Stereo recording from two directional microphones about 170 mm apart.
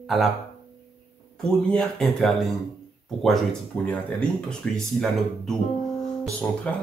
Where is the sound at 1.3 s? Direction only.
5° left (ahead or behind).